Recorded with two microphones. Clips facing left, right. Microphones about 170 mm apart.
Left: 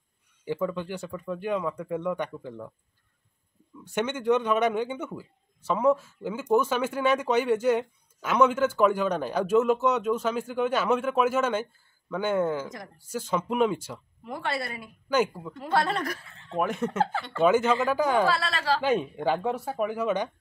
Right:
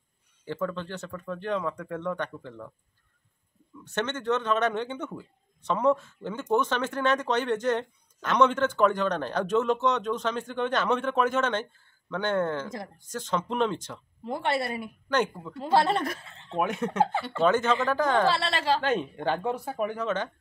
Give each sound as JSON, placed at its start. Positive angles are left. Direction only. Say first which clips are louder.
{"t": 0.5, "sound": "speech", "louder": "left 2 dB", "side_deg": 10}
{"t": 3.8, "sound": "speech", "louder": "left 3 dB", "side_deg": 10}
{"t": 14.2, "sound": "a woman's voice", "louder": "right 4 dB", "side_deg": -25}
{"t": 15.0, "sound": "speech", "louder": "left 2 dB", "side_deg": 5}
{"t": 15.6, "sound": "a woman's voice", "louder": "right 3 dB", "side_deg": -25}
{"t": 16.5, "sound": "speech", "louder": "even", "side_deg": 0}
{"t": 18.2, "sound": "a woman's voice", "louder": "right 1 dB", "side_deg": -25}
{"t": 18.8, "sound": "speech", "louder": "left 2 dB", "side_deg": 10}